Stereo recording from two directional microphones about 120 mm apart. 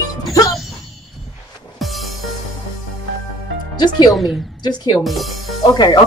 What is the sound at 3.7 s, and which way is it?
Speech, 40° left (ahead or behind).